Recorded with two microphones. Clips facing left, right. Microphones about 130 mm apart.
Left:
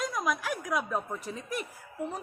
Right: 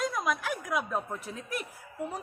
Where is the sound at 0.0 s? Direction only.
Centre (ahead or behind).